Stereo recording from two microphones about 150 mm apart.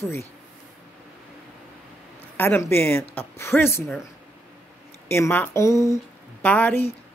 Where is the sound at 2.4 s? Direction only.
15° left (ahead or behind).